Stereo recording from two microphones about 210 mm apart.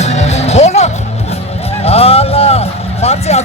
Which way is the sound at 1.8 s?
30° left (ahead or behind).